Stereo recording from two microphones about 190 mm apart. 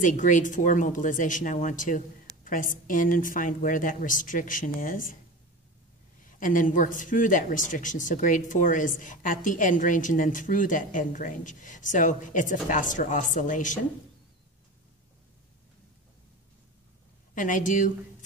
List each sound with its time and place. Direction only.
0.0 s speech: 40° left (ahead or behind)
6.2 s speech: 45° left (ahead or behind)
17.3 s speech: 45° left (ahead or behind)